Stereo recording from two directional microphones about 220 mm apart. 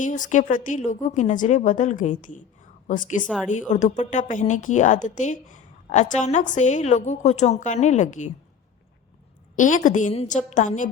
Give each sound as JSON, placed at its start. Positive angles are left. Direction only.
{"t": 0.0, "sound": "a woman's voice", "side_deg": 35}
{"t": 9.6, "sound": "a woman's voice", "side_deg": 35}